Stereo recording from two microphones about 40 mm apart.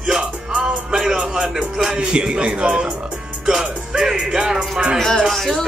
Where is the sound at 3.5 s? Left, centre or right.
Centre.